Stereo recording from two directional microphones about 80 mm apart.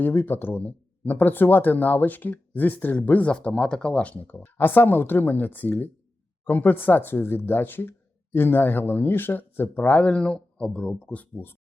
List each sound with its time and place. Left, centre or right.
0.0 s speech: left